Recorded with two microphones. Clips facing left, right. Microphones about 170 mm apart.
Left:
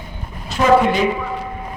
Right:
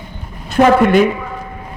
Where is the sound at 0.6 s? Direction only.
55° right (ahead or behind).